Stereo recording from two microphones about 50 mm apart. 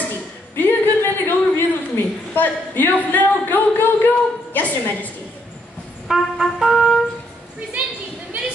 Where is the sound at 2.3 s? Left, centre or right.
Left.